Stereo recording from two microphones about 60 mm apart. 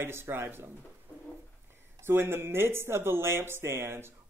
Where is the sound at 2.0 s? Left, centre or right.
Right.